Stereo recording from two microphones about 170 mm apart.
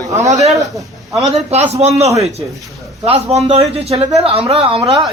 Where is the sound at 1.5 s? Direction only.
40° right (ahead or behind).